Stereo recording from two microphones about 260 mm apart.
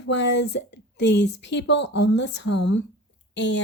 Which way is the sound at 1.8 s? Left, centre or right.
Left.